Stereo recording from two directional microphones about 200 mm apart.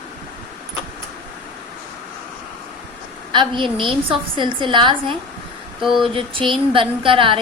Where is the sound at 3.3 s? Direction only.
25° right (ahead or behind).